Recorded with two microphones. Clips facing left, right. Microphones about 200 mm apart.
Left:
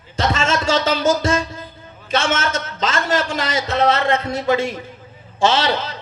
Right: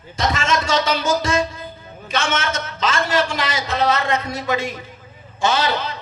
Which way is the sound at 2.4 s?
30° left (ahead or behind).